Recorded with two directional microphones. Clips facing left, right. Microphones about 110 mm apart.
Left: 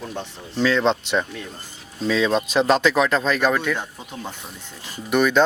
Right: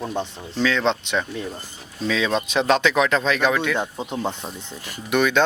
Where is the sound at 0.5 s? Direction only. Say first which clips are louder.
Left 2 dB; 5° left (ahead or behind).